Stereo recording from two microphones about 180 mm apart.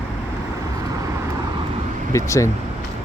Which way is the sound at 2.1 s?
15° left (ahead or behind).